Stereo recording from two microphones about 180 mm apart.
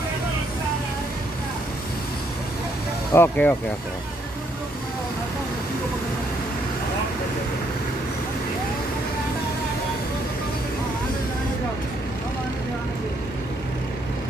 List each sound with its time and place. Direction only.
3.1 s speech: 10° left (ahead or behind)